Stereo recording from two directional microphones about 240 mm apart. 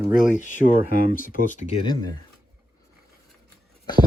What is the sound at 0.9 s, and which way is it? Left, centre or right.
Speech, left.